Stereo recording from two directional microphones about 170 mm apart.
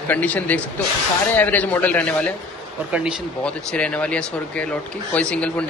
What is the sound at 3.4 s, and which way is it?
Speech, 5° left (ahead or behind).